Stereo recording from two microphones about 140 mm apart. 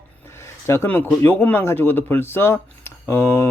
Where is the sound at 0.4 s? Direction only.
20° left (ahead or behind).